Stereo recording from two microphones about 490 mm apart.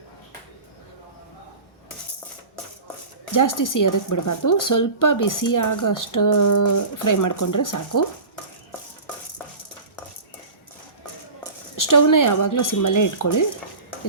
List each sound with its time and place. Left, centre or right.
3.3 s speech: left
11.8 s speech: left